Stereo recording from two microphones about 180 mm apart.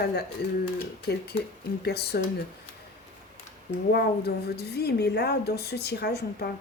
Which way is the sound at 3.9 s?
65° left (ahead or behind).